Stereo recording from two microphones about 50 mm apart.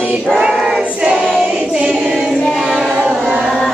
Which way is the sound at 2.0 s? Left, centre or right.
Centre.